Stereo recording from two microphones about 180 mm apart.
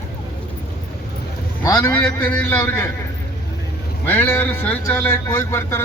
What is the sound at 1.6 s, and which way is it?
Speech, 15° left (ahead or behind).